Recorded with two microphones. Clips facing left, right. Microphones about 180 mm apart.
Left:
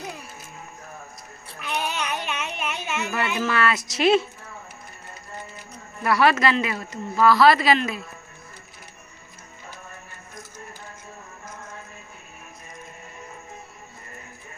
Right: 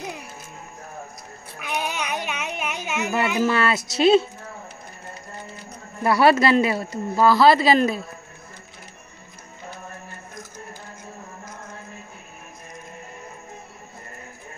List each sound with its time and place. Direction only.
1.6 s a sound: 15° right (ahead or behind)
3.4 s a woman's voice: 30° right (ahead or behind)
6.0 s speech: 30° right (ahead or behind)